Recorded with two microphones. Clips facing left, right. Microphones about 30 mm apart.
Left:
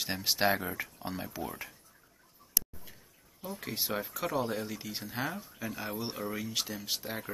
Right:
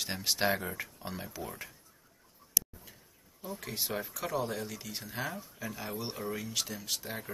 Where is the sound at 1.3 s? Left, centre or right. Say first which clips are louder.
Left 3 dB; centre.